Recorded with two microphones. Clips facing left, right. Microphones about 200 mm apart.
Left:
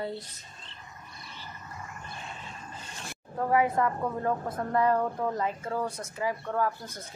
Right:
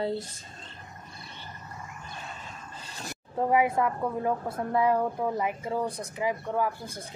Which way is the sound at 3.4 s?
15° right (ahead or behind).